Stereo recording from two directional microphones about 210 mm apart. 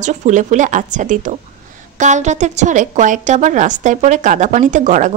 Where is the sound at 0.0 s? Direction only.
35° right (ahead or behind).